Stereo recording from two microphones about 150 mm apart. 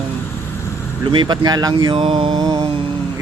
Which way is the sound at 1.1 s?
30° right (ahead or behind).